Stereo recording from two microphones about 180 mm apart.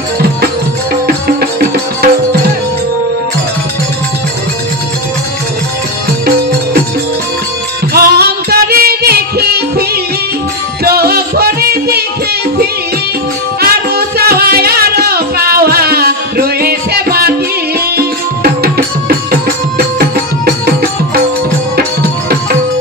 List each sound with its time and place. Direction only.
1.0 s music: 60° right (ahead or behind)
7.9 s music: 60° right (ahead or behind)
13.6 s music: 60° right (ahead or behind)